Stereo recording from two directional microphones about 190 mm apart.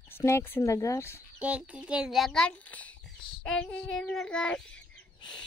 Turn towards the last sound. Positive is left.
turn(degrees=5)  # may be behind; listen again after turning